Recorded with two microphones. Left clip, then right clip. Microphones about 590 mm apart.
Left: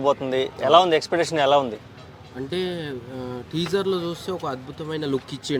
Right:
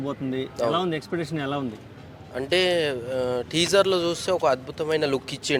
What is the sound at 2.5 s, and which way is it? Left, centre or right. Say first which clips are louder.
Speech: right 7 dB; right.